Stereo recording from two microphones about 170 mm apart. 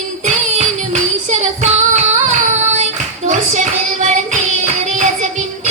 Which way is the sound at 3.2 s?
45° right (ahead or behind).